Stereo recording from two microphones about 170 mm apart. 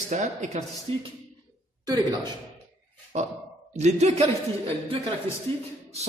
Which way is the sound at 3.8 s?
40° right (ahead or behind).